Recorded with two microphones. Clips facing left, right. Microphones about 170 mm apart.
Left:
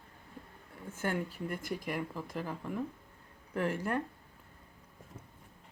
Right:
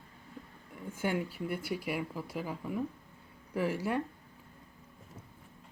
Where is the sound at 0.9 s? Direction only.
10° right (ahead or behind).